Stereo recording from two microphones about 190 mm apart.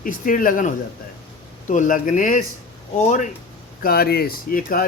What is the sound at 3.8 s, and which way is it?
Speech, 55° left (ahead or behind).